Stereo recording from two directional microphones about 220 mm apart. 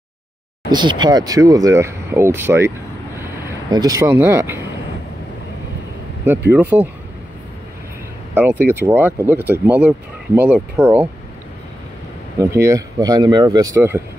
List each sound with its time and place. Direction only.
0.7 s speech: 20° right (ahead or behind)
3.7 s speech: 15° right (ahead or behind)
6.2 s speech: 10° right (ahead or behind)
8.4 s speech: 10° right (ahead or behind)
12.4 s speech: 15° right (ahead or behind)